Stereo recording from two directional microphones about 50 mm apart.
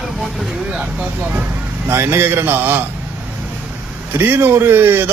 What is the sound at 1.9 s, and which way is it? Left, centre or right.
Speech, right.